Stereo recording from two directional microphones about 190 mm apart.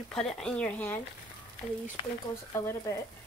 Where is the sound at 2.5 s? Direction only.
15° left (ahead or behind).